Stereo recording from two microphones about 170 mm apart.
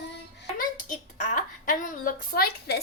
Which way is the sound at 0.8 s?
50° left (ahead or behind).